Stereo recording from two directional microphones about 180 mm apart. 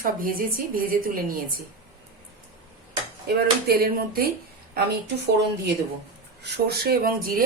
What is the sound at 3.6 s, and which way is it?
Speech, 60° right (ahead or behind).